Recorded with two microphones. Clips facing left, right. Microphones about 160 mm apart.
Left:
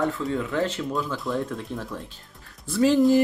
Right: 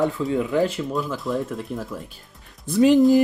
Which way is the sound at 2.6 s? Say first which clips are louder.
Right 4 dB; 20° right (ahead or behind).